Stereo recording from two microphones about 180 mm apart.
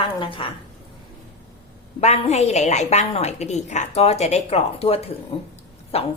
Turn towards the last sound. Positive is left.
turn(degrees=35)  # may be behind; listen again after turning